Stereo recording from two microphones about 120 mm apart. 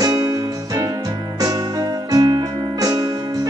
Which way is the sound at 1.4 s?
30° right (ahead or behind).